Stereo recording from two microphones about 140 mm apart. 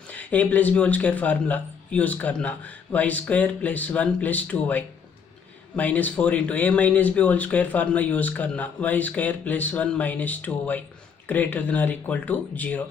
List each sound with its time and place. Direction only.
0.1 s speech: 10° left (ahead or behind)